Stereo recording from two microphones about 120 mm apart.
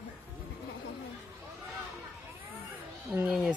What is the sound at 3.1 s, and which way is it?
Speech, 10° right (ahead or behind).